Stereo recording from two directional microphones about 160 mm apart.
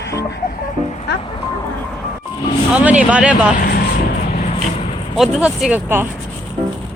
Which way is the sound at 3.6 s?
70° left (ahead or behind).